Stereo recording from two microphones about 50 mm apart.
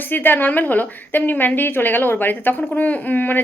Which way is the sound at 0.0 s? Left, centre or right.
Left.